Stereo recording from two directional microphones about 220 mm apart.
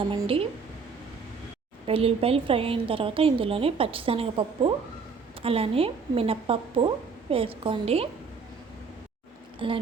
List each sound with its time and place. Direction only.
0.1 s a woman's voice: 25° right (ahead or behind)
1.9 s a woman's voice: 25° right (ahead or behind)
9.6 s speech: 25° right (ahead or behind)